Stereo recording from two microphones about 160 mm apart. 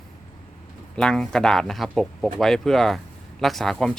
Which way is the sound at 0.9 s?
5° left (ahead or behind).